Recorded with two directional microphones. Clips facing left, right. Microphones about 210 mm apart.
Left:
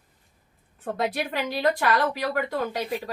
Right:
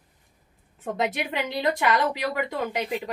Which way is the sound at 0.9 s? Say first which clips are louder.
Even; 20° right (ahead or behind).